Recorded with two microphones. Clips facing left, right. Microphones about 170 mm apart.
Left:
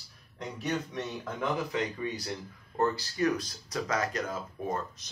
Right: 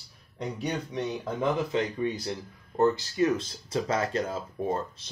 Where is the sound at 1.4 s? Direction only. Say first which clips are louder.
Right 4 dB; 25° right (ahead or behind).